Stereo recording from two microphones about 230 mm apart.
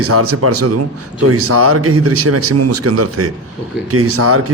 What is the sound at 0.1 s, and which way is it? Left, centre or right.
Speech, right.